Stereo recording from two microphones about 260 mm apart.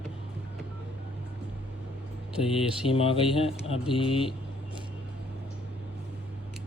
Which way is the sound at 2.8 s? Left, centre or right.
Left.